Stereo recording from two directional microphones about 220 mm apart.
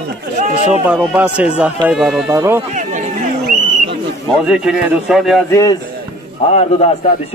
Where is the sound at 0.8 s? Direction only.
5° right (ahead or behind).